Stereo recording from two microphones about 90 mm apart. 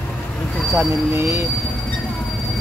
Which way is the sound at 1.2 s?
35° right (ahead or behind).